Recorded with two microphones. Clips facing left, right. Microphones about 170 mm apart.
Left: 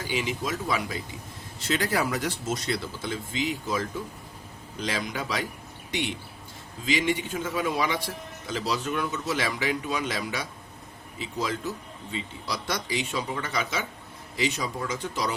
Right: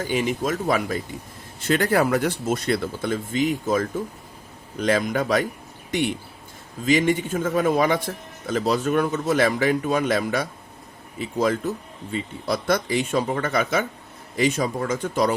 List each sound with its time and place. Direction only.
0.0 s a man's voice: 50° right (ahead or behind)